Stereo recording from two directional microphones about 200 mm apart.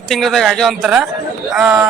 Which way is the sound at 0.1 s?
Centre (ahead or behind).